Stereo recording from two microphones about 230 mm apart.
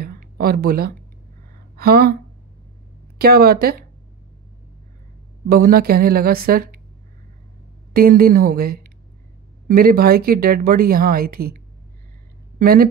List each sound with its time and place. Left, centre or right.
0.0 s a sound: right
1.8 s speech: right
3.2 s speech: right
5.5 s speech: right
7.9 s a woman's voice: right